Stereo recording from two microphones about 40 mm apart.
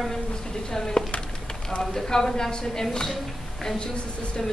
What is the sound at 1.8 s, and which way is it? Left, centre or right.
A woman's voice, centre.